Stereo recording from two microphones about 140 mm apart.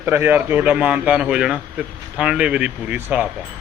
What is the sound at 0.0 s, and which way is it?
Speech, 15° right (ahead or behind).